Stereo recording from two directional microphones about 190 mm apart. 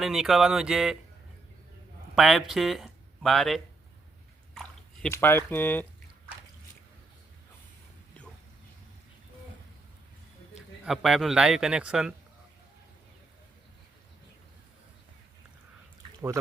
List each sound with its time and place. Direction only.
0.0 s a man's voice: centre (ahead or behind)
2.1 s speech: centre (ahead or behind)
5.1 s speech: 15° left (ahead or behind)
10.8 s a man's voice: centre (ahead or behind)